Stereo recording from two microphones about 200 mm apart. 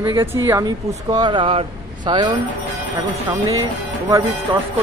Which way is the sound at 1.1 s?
25° right (ahead or behind).